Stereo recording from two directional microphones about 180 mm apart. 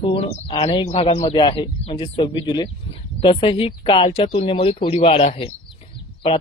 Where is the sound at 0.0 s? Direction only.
30° left (ahead or behind).